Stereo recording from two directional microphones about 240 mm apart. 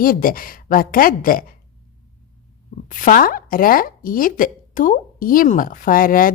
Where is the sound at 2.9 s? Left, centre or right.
Left.